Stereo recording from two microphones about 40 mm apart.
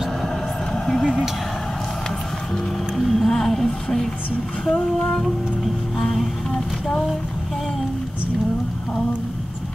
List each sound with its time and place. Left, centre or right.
0.8 s vehicle: centre
3.0 s music: centre
4.6 s a sound: left
5.9 s music: centre